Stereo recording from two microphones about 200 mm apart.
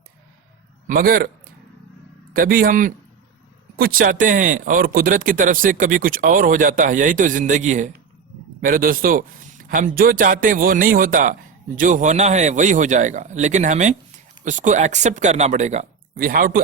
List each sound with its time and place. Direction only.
0.9 s a man's voice: 45° right (ahead or behind)
2.3 s a man's voice: 45° right (ahead or behind)